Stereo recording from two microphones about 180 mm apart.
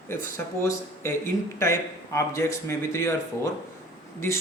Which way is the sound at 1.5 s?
15° left (ahead or behind).